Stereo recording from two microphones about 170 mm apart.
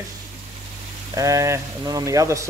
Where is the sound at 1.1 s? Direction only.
20° right (ahead or behind).